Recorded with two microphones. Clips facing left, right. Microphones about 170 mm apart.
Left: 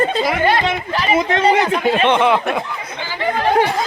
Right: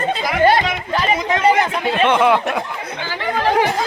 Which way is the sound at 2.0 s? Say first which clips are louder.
Right 3 dB; 5° right (ahead or behind).